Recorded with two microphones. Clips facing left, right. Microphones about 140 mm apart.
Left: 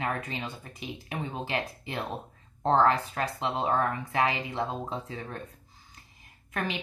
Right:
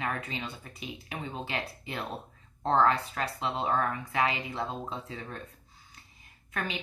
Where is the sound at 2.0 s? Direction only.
15° left (ahead or behind).